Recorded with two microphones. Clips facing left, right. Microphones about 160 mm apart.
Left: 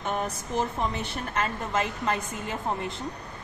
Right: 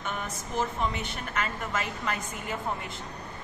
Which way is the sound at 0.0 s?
35° left (ahead or behind).